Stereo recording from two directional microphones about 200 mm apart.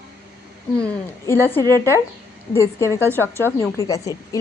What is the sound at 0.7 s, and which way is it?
A woman's voice, 5° left (ahead or behind).